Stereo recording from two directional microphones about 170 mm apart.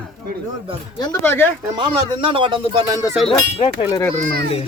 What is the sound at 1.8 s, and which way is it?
Speech, 30° right (ahead or behind).